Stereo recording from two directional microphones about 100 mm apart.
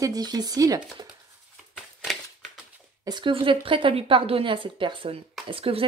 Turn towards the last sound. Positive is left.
turn(degrees=-65)  # may be behind; listen again after turning